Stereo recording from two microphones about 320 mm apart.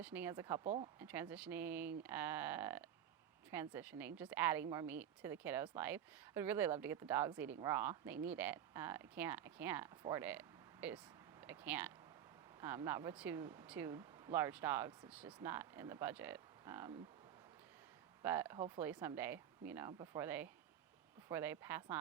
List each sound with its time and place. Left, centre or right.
0.0 s speech: centre
0.6 s speech: right
0.9 s speech: centre
18.2 s speech: centre